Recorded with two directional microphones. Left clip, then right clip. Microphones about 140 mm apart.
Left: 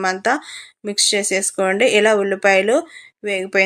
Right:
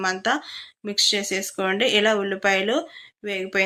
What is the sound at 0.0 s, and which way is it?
Speech, 35° left (ahead or behind).